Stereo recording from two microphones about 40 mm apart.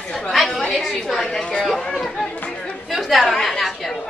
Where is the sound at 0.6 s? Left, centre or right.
Centre.